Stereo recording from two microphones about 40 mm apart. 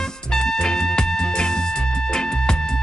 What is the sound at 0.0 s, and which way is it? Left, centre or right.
Music, centre.